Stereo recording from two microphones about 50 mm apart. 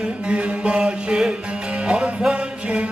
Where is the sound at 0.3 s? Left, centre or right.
Right.